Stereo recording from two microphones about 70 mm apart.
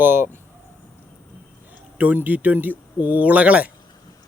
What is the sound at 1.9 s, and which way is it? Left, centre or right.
Speech, right.